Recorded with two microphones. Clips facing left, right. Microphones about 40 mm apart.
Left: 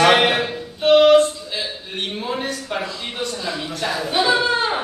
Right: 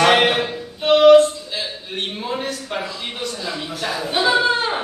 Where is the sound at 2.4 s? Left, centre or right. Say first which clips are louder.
Left 1 dB; centre.